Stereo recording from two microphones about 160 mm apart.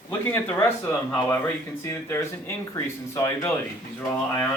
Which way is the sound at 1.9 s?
15° left (ahead or behind).